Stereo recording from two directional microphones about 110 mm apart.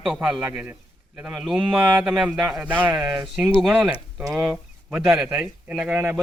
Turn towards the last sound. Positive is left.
turn(degrees=-10)  # may be behind; listen again after turning